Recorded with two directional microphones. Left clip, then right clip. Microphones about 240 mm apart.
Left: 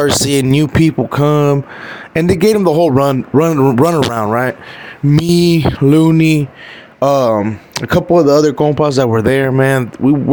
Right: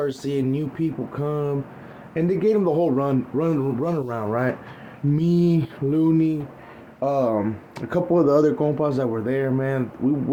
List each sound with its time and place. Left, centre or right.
0.0 s speech: left